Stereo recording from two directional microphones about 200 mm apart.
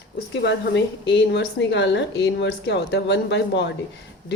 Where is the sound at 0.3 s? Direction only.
60° left (ahead or behind).